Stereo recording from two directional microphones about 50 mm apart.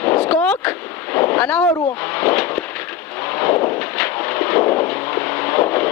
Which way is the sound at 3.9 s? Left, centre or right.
Left.